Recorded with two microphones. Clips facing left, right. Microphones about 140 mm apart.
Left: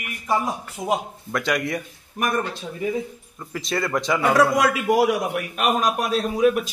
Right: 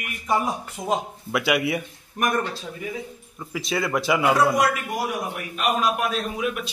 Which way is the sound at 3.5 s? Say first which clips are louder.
Even; centre (ahead or behind).